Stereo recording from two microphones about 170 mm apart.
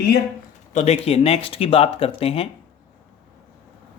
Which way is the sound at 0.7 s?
40° left (ahead or behind).